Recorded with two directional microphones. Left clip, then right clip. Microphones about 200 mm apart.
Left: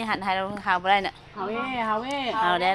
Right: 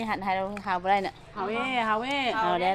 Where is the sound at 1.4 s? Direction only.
20° left (ahead or behind).